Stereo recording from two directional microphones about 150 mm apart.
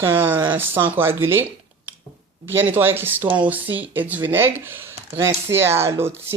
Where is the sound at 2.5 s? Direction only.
15° right (ahead or behind).